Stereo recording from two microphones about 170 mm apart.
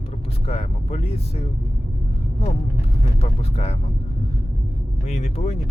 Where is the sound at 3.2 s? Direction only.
40° left (ahead or behind).